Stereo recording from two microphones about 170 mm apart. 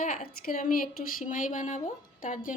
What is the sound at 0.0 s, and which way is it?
Speech, 55° left (ahead or behind).